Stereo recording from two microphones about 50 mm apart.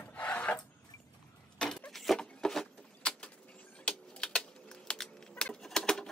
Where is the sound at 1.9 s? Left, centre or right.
Centre.